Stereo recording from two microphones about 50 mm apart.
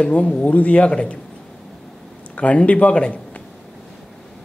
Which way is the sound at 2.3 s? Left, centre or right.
Left.